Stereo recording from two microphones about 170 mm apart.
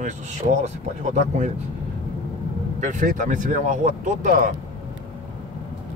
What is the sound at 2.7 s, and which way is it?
Speech, 45° right (ahead or behind).